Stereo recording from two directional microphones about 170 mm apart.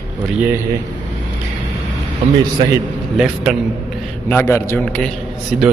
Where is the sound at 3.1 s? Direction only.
5° right (ahead or behind).